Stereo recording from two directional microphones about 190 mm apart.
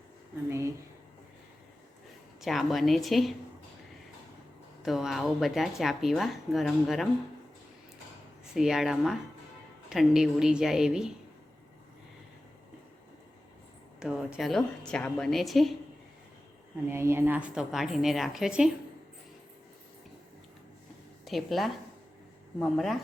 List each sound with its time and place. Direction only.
2.4 s a woman's voice: centre (ahead or behind)
4.8 s a woman's voice: centre (ahead or behind)
8.5 s a woman's voice: centre (ahead or behind)
14.0 s a woman's voice: 5° right (ahead or behind)
16.9 s a woman's voice: 15° right (ahead or behind)
21.2 s a woman's voice: centre (ahead or behind)